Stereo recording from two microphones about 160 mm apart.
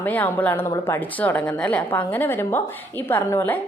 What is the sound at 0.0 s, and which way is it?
A woman's voice, 10° left (ahead or behind).